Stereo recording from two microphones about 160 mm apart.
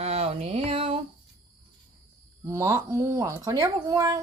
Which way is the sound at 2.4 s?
20° right (ahead or behind).